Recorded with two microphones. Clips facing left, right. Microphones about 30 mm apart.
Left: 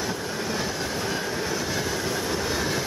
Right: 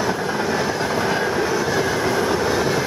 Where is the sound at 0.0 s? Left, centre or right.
Right.